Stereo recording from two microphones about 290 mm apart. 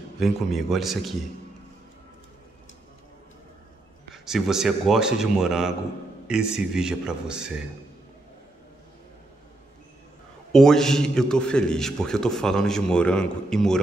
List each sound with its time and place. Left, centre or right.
0.2 s a man's voice: centre
4.1 s a man's voice: centre
10.5 s a man's voice: centre